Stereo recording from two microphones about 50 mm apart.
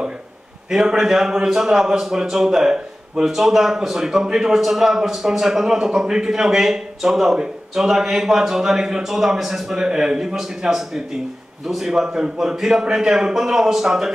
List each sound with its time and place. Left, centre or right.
0.7 s a man's voice: centre